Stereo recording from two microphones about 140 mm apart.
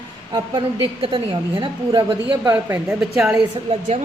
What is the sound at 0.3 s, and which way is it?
A woman's voice, 35° right (ahead or behind).